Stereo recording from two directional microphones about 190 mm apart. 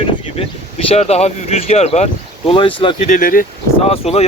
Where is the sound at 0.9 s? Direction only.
35° left (ahead or behind).